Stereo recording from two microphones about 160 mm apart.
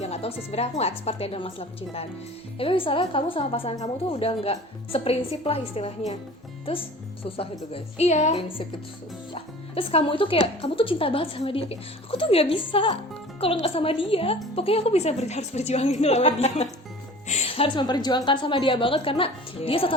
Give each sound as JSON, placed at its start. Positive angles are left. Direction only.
{"t": 0.0, "sound": "a woman's voice", "side_deg": 40}